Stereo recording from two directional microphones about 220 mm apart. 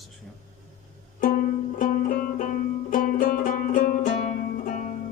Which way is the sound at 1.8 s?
40° left (ahead or behind).